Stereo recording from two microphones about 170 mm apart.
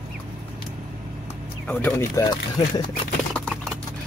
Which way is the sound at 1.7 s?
10° left (ahead or behind).